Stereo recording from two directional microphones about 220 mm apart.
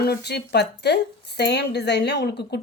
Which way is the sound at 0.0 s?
45° left (ahead or behind).